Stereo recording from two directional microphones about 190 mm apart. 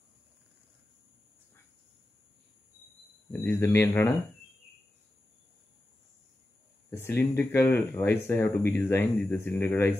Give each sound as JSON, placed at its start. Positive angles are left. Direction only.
{"t": 3.4, "sound": "speech", "side_deg": 15}
{"t": 6.9, "sound": "speech", "side_deg": 10}